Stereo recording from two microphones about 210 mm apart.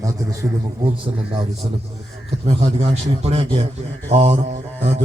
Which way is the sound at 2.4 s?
30° right (ahead or behind).